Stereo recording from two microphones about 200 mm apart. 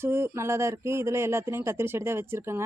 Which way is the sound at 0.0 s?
10° right (ahead or behind).